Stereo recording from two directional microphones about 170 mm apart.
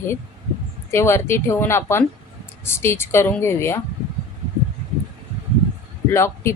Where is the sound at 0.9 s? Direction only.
15° left (ahead or behind).